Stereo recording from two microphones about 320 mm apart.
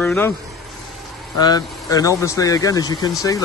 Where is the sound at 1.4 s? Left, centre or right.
Centre.